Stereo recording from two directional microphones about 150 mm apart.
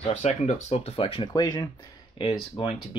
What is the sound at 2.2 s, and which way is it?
Speech, 35° left (ahead or behind).